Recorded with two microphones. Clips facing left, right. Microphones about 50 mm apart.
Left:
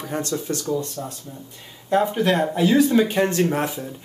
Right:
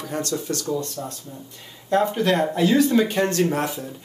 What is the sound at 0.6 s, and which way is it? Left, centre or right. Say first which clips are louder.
Speech: left 1 dB; centre.